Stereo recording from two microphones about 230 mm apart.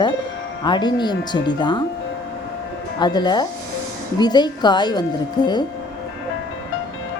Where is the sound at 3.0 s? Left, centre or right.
Centre.